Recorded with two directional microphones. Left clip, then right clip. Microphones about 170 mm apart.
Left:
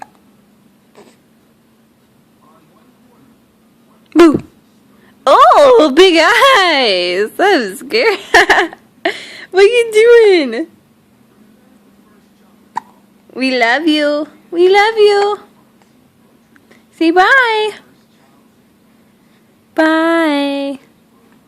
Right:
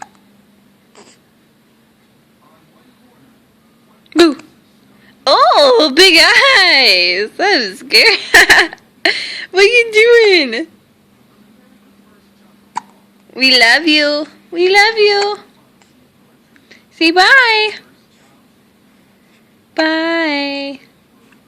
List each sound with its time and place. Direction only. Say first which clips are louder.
5.2 s speech: left 3 dB; 30° left (ahead or behind)
12.7 s hiccup: left 1 dB; 10° left (ahead or behind)
13.3 s speech: right 4 dB; 20° left (ahead or behind)
16.6 s speech: right 1 dB; 20° left (ahead or behind)
19.7 s a sound: left 3 dB; 30° left (ahead or behind)